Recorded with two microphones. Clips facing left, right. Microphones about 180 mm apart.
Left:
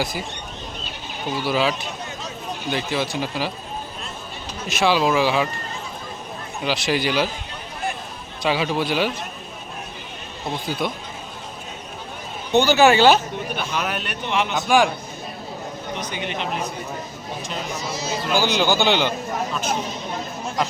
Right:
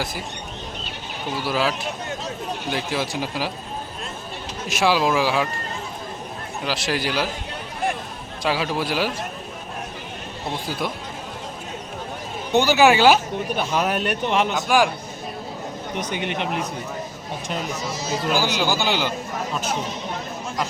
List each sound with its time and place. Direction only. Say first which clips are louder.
1.4 s speech: left 2 dB; centre (ahead or behind)
4.8 s speech: left 1 dB; 5° right (ahead or behind)
6.7 s speech: left 3 dB; centre (ahead or behind)
8.4 s speech: left 2 dB; centre (ahead or behind)
10.7 s speech: left 3 dB; 5° right (ahead or behind)
12.5 s speech: left 1 dB; 10° right (ahead or behind)
13.6 s a man's voice: right 5 dB; 35° right (ahead or behind)
16.1 s speech: right 2 dB; 55° right (ahead or behind)
17.9 s speech: right 1 dB; 45° right (ahead or behind)
18.3 s speech: left 5 dB; 5° right (ahead or behind)